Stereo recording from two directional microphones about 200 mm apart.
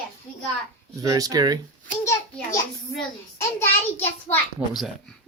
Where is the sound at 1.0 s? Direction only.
15° right (ahead or behind).